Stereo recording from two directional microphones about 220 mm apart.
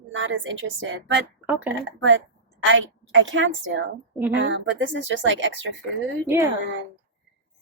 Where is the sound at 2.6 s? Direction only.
60° right (ahead or behind).